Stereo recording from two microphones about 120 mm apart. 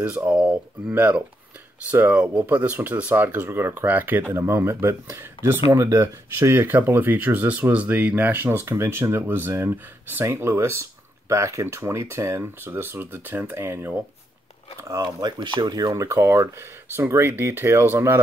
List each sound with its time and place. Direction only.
0.3 s speech: 5° right (ahead or behind)
14.9 s speech: 30° right (ahead or behind)